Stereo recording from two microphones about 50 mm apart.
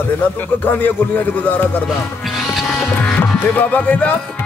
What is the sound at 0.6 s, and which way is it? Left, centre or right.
Speech, left.